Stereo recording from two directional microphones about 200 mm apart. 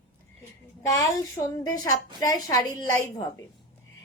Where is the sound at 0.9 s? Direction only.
15° left (ahead or behind).